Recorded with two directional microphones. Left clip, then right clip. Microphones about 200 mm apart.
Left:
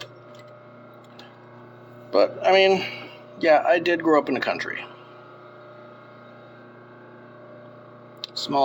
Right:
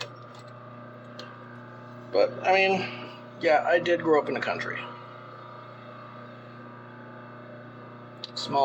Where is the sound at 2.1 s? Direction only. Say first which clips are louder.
Left 4 dB; 50° left (ahead or behind).